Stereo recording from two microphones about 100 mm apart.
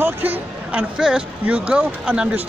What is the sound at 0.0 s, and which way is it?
A man's voice, 20° right (ahead or behind).